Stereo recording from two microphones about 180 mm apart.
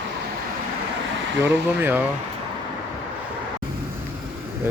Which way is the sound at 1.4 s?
10° right (ahead or behind).